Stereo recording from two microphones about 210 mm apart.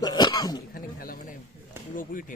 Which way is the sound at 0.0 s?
20° left (ahead or behind).